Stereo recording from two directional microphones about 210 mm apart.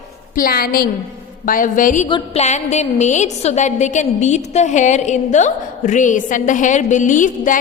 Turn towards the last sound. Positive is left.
turn(degrees=40)  # may be behind; listen again after turning